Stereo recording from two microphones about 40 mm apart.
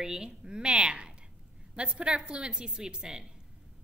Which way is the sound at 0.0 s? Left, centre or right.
Centre.